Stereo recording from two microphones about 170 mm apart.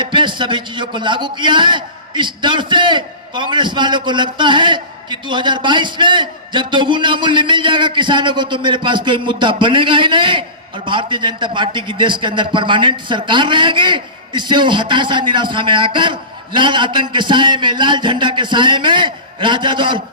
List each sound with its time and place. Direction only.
0.0 s a man's voice: 30° right (ahead or behind)